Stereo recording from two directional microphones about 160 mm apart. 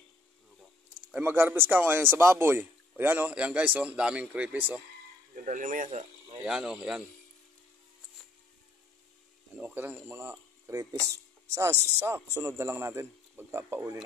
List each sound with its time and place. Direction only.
1.1 s a man's voice: 10° right (ahead or behind)
5.3 s speech: 50° right (ahead or behind)
6.4 s speech: 5° right (ahead or behind)
9.6 s a man's voice: 10° right (ahead or behind)